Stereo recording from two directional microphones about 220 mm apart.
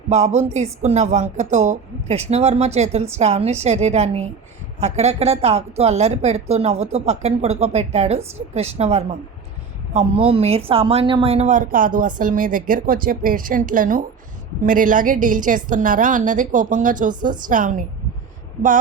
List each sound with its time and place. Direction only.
0.1 s a woman's voice: 30° right (ahead or behind)